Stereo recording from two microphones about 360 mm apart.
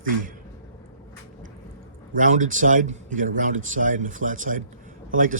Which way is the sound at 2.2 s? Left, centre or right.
Right.